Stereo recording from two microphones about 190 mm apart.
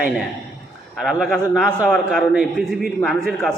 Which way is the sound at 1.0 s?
Centre (ahead or behind).